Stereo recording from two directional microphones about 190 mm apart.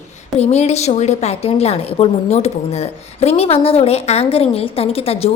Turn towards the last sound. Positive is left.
turn(degrees=30)  # may be behind; listen again after turning